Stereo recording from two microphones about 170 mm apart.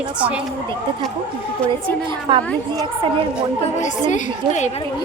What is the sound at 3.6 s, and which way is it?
A woman's voice, 45° left (ahead or behind).